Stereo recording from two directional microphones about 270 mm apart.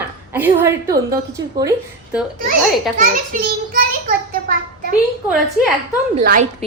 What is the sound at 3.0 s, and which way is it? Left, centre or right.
Speech, right.